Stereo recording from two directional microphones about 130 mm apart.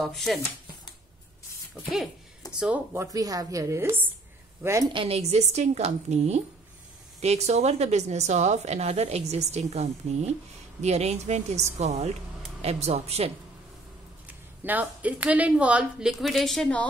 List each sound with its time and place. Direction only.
0.0 s speech: centre (ahead or behind)
2.6 s a woman's voice: 15° right (ahead or behind)
3.1 s a woman's voice: 25° right (ahead or behind)
4.9 s a woman's voice: 50° right (ahead or behind)
14.2 s a woman's voice: 15° right (ahead or behind); by 16.8 s 5° left (ahead or behind)